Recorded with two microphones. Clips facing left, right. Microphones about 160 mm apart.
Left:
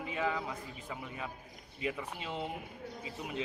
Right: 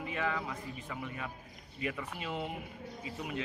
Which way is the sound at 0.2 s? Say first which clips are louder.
Left 1 dB; 10° left (ahead or behind).